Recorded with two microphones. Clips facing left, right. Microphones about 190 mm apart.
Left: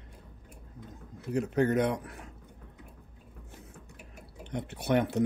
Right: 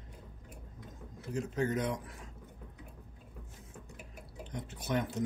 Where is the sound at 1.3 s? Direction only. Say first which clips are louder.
Left 6 dB; 65° left (ahead or behind).